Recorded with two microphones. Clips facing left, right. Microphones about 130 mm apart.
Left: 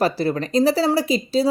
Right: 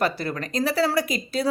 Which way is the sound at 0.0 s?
35° left (ahead or behind).